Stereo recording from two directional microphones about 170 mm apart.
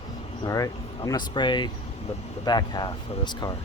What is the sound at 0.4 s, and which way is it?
Speech, 20° left (ahead or behind).